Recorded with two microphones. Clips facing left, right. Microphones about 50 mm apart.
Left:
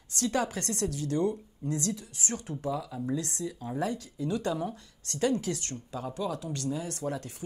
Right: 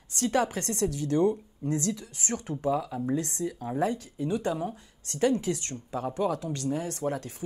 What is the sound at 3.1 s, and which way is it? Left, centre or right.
Speech, right.